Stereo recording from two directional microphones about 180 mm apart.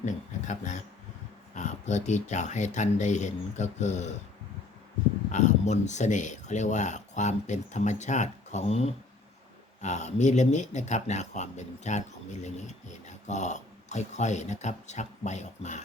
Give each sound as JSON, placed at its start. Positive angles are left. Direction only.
{"t": 0.0, "sound": "speech", "side_deg": 40}
{"t": 5.3, "sound": "speech", "side_deg": 40}